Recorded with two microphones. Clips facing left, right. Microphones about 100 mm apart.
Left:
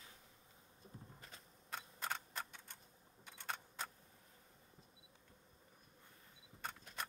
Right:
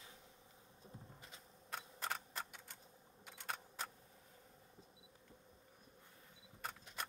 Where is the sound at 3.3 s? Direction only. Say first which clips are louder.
Even; 5° right (ahead or behind).